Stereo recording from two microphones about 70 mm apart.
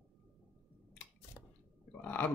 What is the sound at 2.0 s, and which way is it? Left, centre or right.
Stomach rumble, left.